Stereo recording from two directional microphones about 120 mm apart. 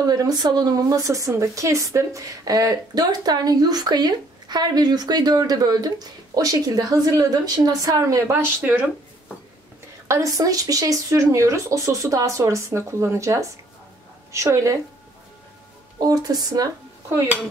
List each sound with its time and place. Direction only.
0.0 s speech: 35° right (ahead or behind)
10.0 s speech: 25° right (ahead or behind)
16.0 s speech: 30° right (ahead or behind)
17.1 s speech: 20° right (ahead or behind)